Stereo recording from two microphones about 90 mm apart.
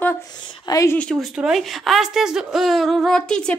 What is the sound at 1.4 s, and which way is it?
Speech, 5° right (ahead or behind).